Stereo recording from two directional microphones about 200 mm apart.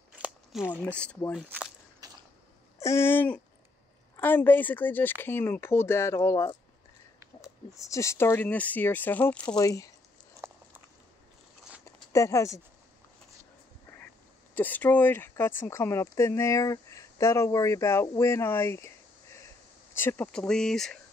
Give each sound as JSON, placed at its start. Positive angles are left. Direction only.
{"t": 0.1, "sound": "a sound", "side_deg": -5}
{"t": 0.8, "sound": "speech", "side_deg": 5}
{"t": 2.0, "sound": "a sound", "side_deg": -20}
{"t": 2.8, "sound": "speech", "side_deg": 10}
{"t": 7.7, "sound": "speech", "side_deg": 15}
{"t": 9.6, "sound": "speech", "side_deg": 15}
{"t": 10.4, "sound": "biting", "side_deg": -15}
{"t": 11.8, "sound": "a sound", "side_deg": 15}
{"t": 14.5, "sound": "speech", "side_deg": 10}
{"t": 20.0, "sound": "speech", "side_deg": 10}